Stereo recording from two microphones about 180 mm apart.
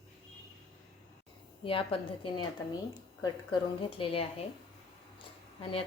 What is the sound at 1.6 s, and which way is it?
Speech, 30° left (ahead or behind).